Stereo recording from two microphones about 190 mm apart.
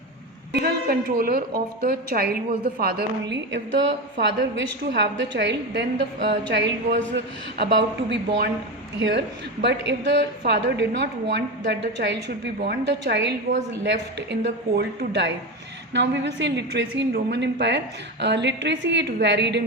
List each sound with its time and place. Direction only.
0.5 s a woman's voice: 55° right (ahead or behind)